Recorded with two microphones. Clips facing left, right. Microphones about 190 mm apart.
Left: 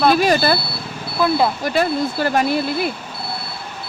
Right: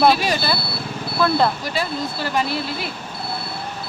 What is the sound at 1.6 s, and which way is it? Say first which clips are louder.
Speech: left 6 dB; 50° left (ahead or behind).